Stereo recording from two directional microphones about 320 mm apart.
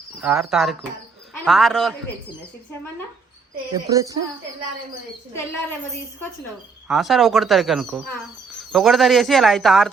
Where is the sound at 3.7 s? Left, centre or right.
Centre.